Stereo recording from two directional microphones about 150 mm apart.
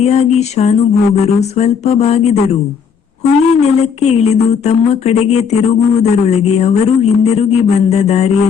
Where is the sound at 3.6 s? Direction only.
45° left (ahead or behind).